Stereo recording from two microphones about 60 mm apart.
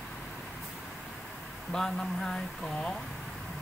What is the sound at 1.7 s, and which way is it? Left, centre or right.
Speech, centre.